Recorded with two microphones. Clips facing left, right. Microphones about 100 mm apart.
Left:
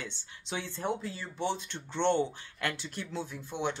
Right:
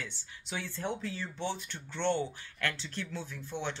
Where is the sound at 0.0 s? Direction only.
25° left (ahead or behind).